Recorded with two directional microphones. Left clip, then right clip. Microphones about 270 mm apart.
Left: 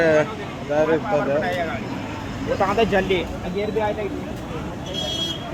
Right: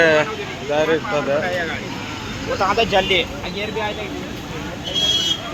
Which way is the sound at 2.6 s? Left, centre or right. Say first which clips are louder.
Right 3 dB; left.